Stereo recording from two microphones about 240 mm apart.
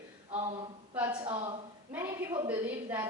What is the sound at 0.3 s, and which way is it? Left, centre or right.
Speech, right.